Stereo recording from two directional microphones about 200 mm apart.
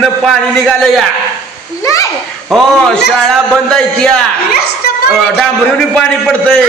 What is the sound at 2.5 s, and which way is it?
A man's voice, centre (ahead or behind).